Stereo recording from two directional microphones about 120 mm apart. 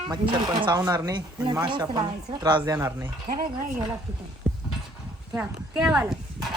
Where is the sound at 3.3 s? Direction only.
75° right (ahead or behind).